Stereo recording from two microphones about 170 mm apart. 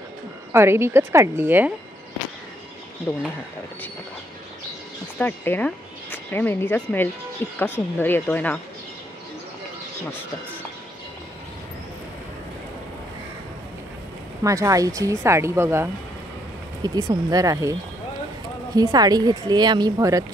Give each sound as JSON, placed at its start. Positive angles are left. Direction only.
{"t": 0.5, "sound": "speech", "side_deg": -15}
{"t": 3.1, "sound": "speech", "side_deg": 10}
{"t": 5.2, "sound": "speech", "side_deg": 10}
{"t": 14.4, "sound": "speech", "side_deg": -20}
{"t": 18.8, "sound": "speech", "side_deg": -25}